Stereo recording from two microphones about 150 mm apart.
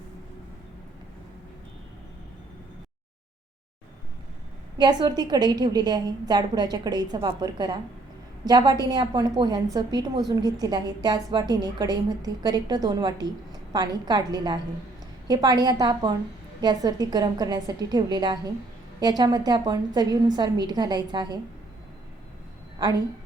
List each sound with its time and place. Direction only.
4.8 s a woman's voice: 30° right (ahead or behind)